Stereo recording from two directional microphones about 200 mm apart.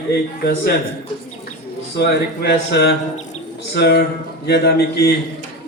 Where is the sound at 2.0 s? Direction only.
55° left (ahead or behind).